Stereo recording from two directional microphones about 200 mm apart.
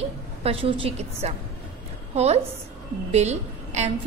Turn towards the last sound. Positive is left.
turn(degrees=-35)  # may be behind; listen again after turning